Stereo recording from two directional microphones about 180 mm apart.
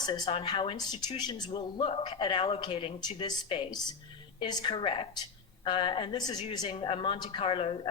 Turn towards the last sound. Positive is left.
turn(degrees=30)  # may be behind; listen again after turning